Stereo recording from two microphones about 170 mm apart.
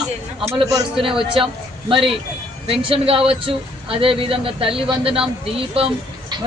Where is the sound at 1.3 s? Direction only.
30° right (ahead or behind).